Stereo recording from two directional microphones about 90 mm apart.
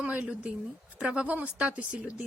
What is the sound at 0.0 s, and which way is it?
A woman's voice, 10° right (ahead or behind).